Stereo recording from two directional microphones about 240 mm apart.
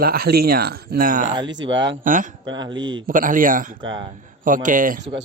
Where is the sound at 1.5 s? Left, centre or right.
Right.